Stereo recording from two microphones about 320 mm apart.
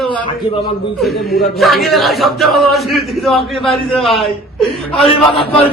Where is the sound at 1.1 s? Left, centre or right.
Left.